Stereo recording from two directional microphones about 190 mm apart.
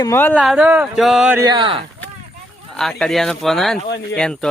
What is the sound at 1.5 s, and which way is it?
Speech, 25° right (ahead or behind).